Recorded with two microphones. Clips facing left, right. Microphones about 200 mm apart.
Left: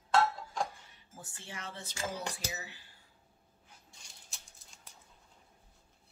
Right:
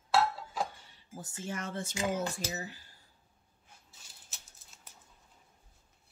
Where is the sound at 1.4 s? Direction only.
45° right (ahead or behind).